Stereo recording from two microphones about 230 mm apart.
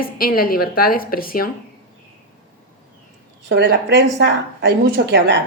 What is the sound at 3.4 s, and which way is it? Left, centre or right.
Speech, right.